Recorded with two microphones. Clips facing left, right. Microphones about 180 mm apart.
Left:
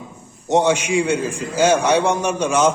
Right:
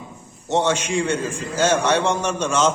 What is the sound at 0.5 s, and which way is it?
A man's voice, 10° left (ahead or behind).